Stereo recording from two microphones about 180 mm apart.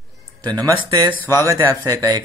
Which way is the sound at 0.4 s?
25° right (ahead or behind).